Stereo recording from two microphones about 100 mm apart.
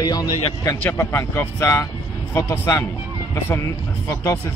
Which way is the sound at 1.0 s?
25° left (ahead or behind).